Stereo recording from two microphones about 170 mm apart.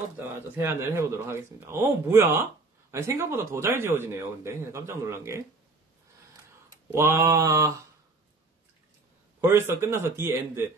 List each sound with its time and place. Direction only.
0.7 s speech: 15° right (ahead or behind)
6.9 s mantra: 15° right (ahead or behind)
9.4 s speech: 15° right (ahead or behind)